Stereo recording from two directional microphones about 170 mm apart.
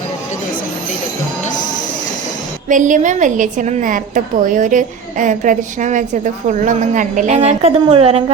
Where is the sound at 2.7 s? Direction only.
50° right (ahead or behind).